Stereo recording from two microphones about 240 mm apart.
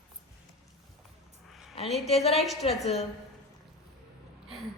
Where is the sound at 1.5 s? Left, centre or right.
Centre.